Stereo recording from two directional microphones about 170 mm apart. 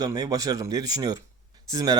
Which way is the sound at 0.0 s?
20° right (ahead or behind).